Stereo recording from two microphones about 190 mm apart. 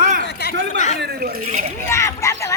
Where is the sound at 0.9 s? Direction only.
55° right (ahead or behind).